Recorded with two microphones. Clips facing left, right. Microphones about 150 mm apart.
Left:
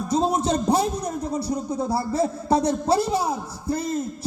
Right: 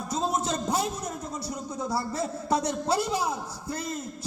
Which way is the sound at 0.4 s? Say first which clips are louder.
Left 7 dB; 35° left (ahead or behind).